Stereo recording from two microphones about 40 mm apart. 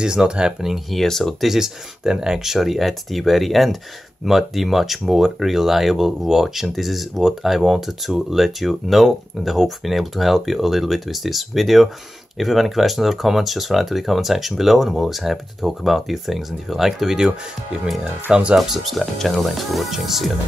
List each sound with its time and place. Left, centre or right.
0.0 s speech: centre
0.6 s speech: centre
1.4 s speech: centre
18.3 s speech: right
18.6 s speech: centre